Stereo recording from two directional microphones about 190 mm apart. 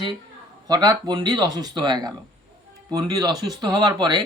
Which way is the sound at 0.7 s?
20° right (ahead or behind).